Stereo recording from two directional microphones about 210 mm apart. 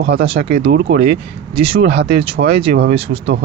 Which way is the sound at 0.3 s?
25° right (ahead or behind).